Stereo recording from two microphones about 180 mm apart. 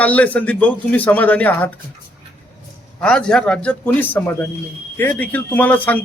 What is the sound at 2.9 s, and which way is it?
A man's voice, 5° left (ahead or behind).